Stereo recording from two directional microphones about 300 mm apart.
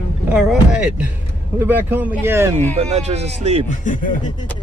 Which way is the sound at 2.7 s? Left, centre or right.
Right.